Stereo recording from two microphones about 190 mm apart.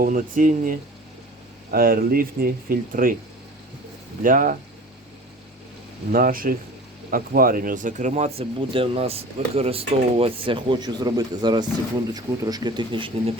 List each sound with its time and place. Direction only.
0.0 s speech: 45° right (ahead or behind)
4.2 s speech: 45° right (ahead or behind)
6.1 s speech: 50° right (ahead or behind); by 13.3 s 25° right (ahead or behind)